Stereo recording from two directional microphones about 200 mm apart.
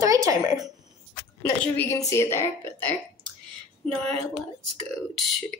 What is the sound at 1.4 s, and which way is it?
A woman's voice, 15° left (ahead or behind).